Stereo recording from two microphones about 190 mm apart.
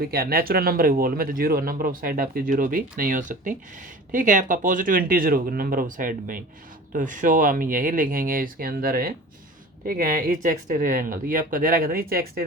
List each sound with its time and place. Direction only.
0.0 s speech: 55° right (ahead or behind)